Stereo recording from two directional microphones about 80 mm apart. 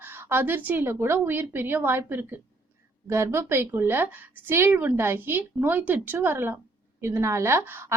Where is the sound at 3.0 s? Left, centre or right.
Right.